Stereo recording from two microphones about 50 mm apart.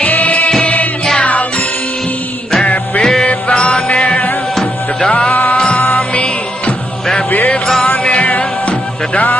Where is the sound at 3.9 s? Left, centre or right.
Left.